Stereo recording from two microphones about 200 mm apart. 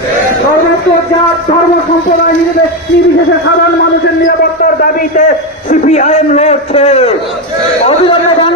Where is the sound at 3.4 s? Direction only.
55° left (ahead or behind); by 7.1 s 30° left (ahead or behind).